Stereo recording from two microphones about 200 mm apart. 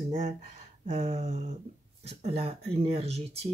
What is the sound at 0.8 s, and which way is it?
Speech, 35° right (ahead or behind).